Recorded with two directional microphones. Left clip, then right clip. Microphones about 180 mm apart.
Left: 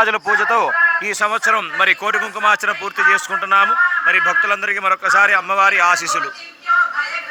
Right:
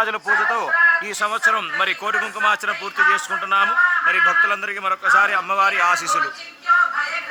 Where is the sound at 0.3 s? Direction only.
25° left (ahead or behind); by 6.3 s 10° left (ahead or behind).